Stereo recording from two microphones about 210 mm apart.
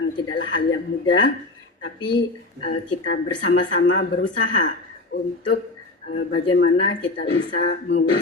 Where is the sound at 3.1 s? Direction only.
60° left (ahead or behind).